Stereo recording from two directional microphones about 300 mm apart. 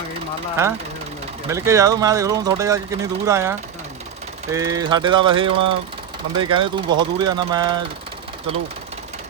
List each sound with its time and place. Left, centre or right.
1.5 s speech: centre